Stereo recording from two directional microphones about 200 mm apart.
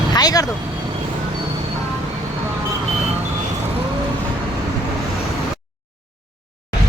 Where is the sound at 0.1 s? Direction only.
20° left (ahead or behind).